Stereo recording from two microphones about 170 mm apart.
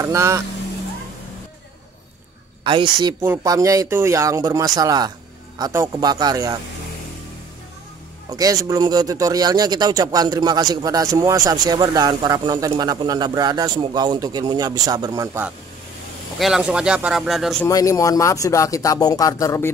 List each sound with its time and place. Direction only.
0.0 s speech: 15° right (ahead or behind)
2.6 s speech: 30° right (ahead or behind)
3.2 s speech: 15° right (ahead or behind)
8.3 s speech: 20° right (ahead or behind)
16.3 s speech: centre (ahead or behind)
17.6 s speech: 20° left (ahead or behind)